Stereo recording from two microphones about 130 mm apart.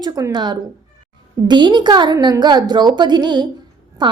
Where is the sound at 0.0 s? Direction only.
30° right (ahead or behind).